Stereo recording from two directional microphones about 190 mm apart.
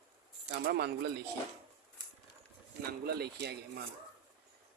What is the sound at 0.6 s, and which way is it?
Speech, 55° right (ahead or behind).